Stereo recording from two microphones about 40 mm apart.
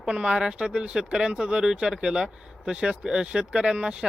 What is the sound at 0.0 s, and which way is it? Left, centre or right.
Speech, centre.